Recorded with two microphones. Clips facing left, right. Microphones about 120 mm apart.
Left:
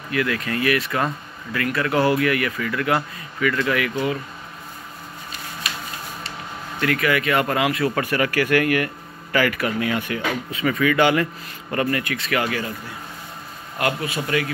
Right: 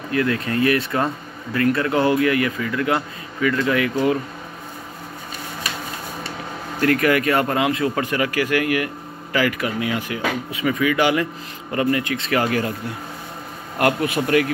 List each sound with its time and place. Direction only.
0.1 s speech: 30° right (ahead or behind)
3.9 s speech: 45° right (ahead or behind)
6.8 s speech: 45° right (ahead or behind)
7.3 s speech: 30° right (ahead or behind)
13.7 s a man's voice: 55° right (ahead or behind)